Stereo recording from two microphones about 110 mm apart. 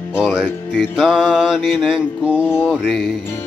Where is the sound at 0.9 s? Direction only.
5° right (ahead or behind).